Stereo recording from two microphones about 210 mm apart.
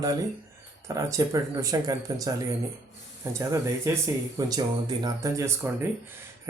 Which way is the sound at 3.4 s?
15° right (ahead or behind).